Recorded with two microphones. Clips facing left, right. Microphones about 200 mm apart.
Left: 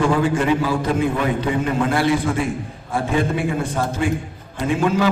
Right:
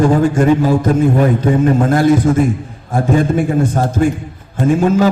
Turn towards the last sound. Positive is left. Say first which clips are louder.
# right 7 dB
turn(degrees=-45)  # may be behind; listen again after turning